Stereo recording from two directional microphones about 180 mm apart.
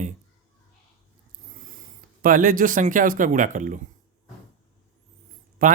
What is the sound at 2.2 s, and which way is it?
Speech, 50° right (ahead or behind).